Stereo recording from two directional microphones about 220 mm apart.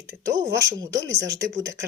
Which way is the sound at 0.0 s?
15° right (ahead or behind).